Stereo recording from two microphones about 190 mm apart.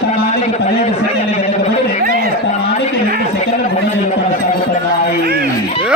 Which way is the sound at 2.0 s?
50° right (ahead or behind).